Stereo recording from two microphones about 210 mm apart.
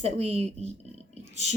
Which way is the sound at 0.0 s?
30° right (ahead or behind).